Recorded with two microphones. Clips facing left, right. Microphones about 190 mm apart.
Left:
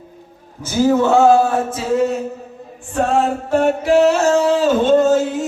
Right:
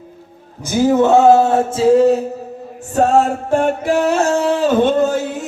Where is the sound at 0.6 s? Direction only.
15° right (ahead or behind).